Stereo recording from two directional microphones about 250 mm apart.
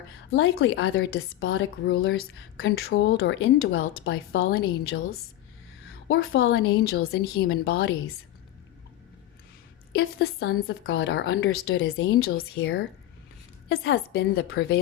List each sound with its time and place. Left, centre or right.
0.3 s a woman's voice: left
2.6 s a woman's voice: left
6.3 s a woman's voice: left
9.9 s a woman's voice: left
12.2 s a woman's voice: left
13.9 s a woman's voice: left